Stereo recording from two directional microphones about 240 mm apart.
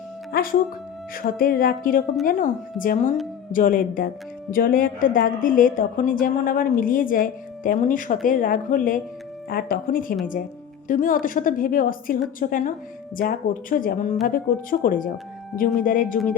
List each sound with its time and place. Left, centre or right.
0.3 s a woman's voice: left